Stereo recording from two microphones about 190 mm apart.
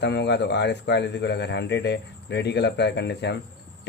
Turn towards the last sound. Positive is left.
turn(degrees=65)  # may be behind; listen again after turning